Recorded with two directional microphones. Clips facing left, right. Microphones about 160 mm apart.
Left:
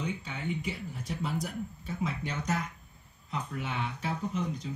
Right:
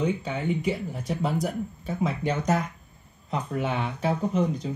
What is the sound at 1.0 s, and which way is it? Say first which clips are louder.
Speech: right 7 dB; 65° right (ahead or behind).